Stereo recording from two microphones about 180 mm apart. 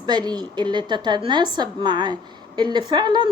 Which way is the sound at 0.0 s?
25° right (ahead or behind).